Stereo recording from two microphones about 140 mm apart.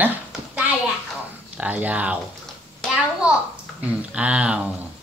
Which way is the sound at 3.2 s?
10° right (ahead or behind).